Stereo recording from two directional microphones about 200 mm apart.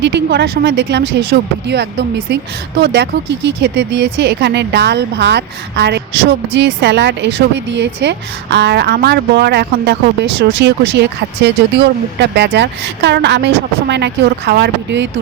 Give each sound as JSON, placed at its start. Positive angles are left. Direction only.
{"t": 0.0, "sound": "speech", "side_deg": -55}